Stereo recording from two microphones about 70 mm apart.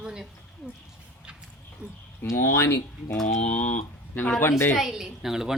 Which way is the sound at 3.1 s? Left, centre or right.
Centre.